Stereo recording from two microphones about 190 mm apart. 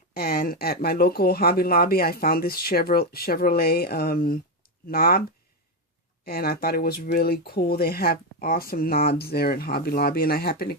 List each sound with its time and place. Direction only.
0.2 s speech: 55° left (ahead or behind)
6.2 s speech: 50° left (ahead or behind)